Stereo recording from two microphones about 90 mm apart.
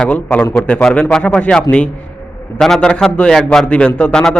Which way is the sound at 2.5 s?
5° left (ahead or behind).